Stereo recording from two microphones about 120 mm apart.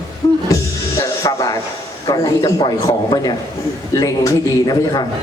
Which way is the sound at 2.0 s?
30° left (ahead or behind).